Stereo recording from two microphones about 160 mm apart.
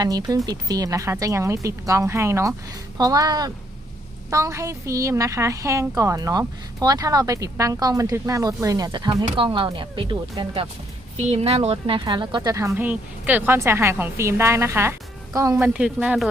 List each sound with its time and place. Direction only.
0.0 s speech: 25° right (ahead or behind)
15.5 s speech: 10° right (ahead or behind)